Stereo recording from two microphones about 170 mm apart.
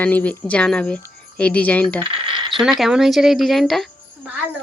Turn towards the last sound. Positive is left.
turn(degrees=-5)  # may be behind; listen again after turning